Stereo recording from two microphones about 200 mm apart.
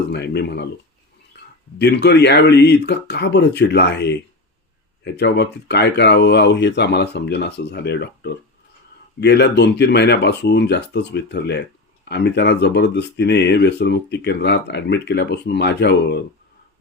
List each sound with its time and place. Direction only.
0.1 s speech: 55° left (ahead or behind)
1.3 s a sound: 60° left (ahead or behind)
1.8 s speech: 55° left (ahead or behind)